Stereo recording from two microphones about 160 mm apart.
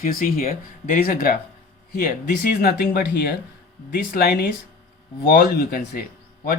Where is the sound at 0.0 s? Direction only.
60° left (ahead or behind).